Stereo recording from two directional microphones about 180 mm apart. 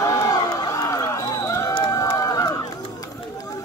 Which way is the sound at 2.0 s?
20° left (ahead or behind).